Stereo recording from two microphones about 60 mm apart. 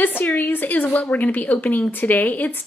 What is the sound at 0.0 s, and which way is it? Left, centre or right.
A woman's voice, left.